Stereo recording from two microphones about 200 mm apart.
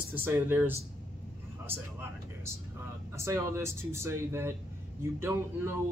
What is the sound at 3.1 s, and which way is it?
Speech, 15° right (ahead or behind).